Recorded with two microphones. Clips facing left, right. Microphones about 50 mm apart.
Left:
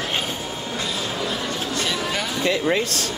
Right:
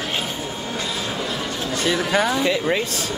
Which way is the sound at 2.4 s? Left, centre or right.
Centre.